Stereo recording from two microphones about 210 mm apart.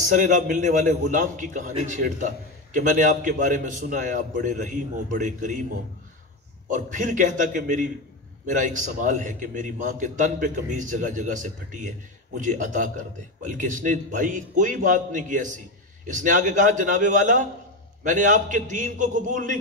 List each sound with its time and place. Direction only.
0.1 s a man's voice: 40° right (ahead or behind)
6.7 s a man's voice: 40° right (ahead or behind)